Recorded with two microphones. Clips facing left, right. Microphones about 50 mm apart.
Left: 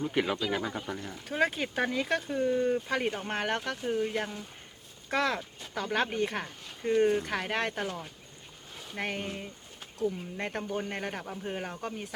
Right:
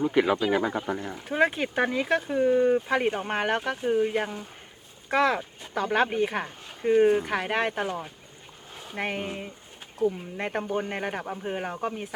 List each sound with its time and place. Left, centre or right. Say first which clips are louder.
0.3 s speech: right 7 dB; centre